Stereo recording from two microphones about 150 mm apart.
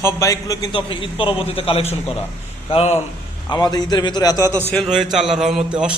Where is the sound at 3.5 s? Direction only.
30° left (ahead or behind).